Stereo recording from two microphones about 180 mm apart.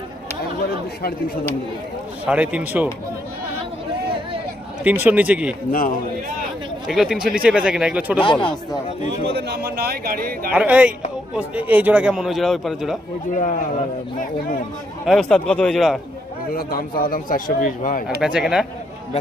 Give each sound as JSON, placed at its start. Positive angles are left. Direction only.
{"t": 2.2, "sound": "speech", "side_deg": -5}
{"t": 4.8, "sound": "speech", "side_deg": -10}
{"t": 5.7, "sound": "a man's voice", "side_deg": 50}
{"t": 6.8, "sound": "a man's voice", "side_deg": 0}
{"t": 8.2, "sound": "speech", "side_deg": 25}
{"t": 9.2, "sound": "a man's voice", "side_deg": -65}
{"t": 10.5, "sound": "a man's voice", "side_deg": -10}
{"t": 15.0, "sound": "a man's voice", "side_deg": 0}
{"t": 16.6, "sound": "a man's voice", "side_deg": 55}
{"t": 18.2, "sound": "a man's voice", "side_deg": -5}